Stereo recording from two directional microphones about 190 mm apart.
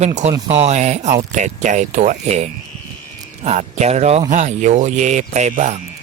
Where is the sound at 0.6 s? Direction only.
35° right (ahead or behind).